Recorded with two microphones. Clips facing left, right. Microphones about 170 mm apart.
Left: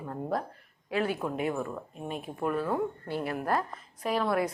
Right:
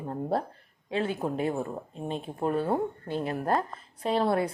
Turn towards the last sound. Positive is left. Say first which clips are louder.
# right 2 dB
turn(degrees=-30)  # may be behind; listen again after turning